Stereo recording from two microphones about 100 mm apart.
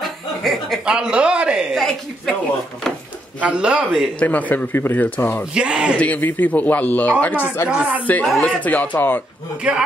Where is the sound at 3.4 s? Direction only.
10° right (ahead or behind).